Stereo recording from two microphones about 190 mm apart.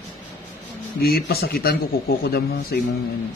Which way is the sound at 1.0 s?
55° left (ahead or behind).